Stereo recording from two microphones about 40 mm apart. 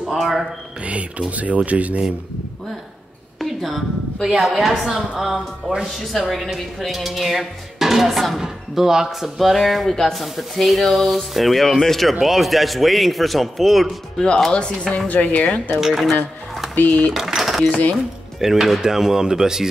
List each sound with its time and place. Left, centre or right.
0.2 s a sound: centre
0.8 s speech: right
3.3 s a woman's voice: centre
5.7 s speech: centre
6.8 s speech: centre
12.1 s speech: centre
14.1 s speech: left
15.0 s speech: left
15.8 s speech: centre
16.7 s speech: left
17.1 s a sound: centre
17.6 s speech: left
18.4 s dishes: centre